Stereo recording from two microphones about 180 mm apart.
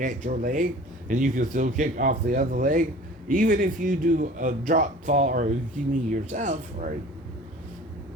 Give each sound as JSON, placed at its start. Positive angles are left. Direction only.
{"t": 0.0, "sound": "speech", "side_deg": -45}